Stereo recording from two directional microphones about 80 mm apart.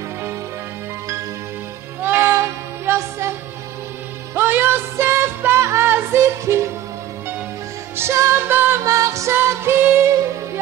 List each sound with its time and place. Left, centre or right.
2.0 s music: right
7.9 s music: right
8.8 s music: right